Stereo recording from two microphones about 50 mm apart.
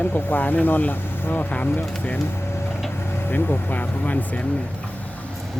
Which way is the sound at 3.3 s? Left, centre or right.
Left.